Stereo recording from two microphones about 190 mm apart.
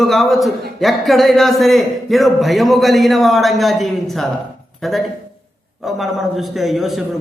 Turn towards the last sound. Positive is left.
turn(degrees=0)  # may be behind; listen again after turning